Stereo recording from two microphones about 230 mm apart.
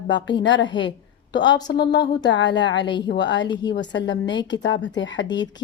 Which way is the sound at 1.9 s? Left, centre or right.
Left.